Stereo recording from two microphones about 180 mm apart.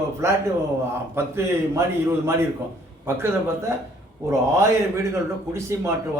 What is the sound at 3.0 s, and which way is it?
A man's voice, 15° right (ahead or behind).